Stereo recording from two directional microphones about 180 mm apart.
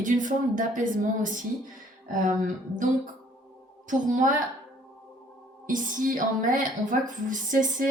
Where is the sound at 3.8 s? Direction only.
45° right (ahead or behind).